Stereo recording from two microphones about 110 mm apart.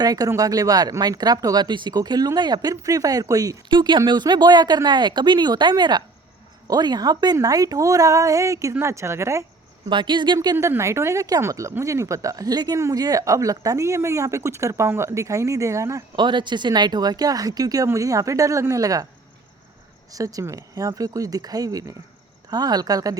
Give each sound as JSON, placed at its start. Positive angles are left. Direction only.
{"t": 0.0, "sound": "speech", "side_deg": -35}
{"t": 9.9, "sound": "speech", "side_deg": -45}
{"t": 10.6, "sound": "speech", "side_deg": -25}
{"t": 16.1, "sound": "speech", "side_deg": -45}
{"t": 20.1, "sound": "speech", "side_deg": -30}